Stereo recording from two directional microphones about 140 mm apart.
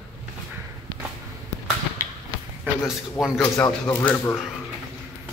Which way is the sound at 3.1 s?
5° right (ahead or behind).